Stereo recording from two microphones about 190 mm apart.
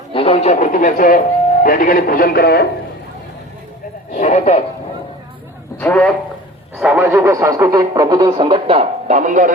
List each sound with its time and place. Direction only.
0.1 s speech: 30° left (ahead or behind); by 2.6 s 55° left (ahead or behind)
4.1 s speech: 40° left (ahead or behind)
5.8 s speech: 5° left (ahead or behind)
6.7 s speech: 5° right (ahead or behind); by 9.5 s 40° right (ahead or behind)